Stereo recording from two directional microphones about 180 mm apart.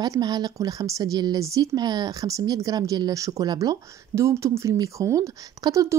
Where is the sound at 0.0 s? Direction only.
20° right (ahead or behind).